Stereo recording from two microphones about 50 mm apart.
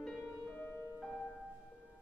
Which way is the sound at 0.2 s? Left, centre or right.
Left.